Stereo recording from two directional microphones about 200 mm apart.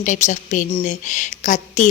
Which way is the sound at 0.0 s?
40° left (ahead or behind).